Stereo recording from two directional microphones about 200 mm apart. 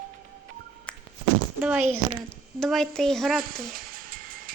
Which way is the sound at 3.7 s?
45° right (ahead or behind).